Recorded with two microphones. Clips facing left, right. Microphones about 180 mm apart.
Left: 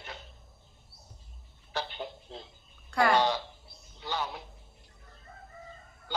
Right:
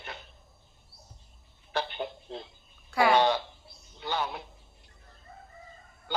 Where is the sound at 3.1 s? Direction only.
60° right (ahead or behind).